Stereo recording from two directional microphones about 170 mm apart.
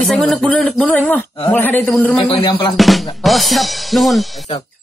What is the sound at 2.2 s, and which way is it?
Music, 30° left (ahead or behind).